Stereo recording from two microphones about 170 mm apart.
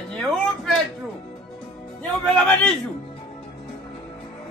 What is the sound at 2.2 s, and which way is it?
Speech, 5° left (ahead or behind).